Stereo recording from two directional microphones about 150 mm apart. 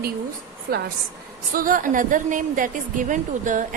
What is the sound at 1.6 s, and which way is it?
A woman's voice, 65° right (ahead or behind).